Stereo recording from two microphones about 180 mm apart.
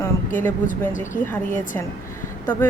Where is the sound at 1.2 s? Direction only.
10° left (ahead or behind).